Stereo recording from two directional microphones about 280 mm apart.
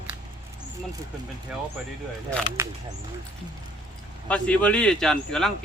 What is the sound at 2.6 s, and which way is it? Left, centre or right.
Speech, centre.